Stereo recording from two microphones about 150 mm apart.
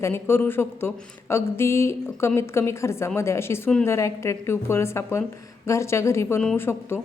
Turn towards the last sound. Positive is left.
turn(degrees=15)  # may be behind; listen again after turning